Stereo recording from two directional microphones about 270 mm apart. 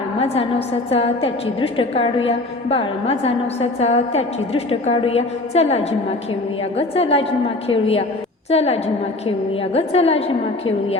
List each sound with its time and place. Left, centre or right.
0.2 s a woman's voice: left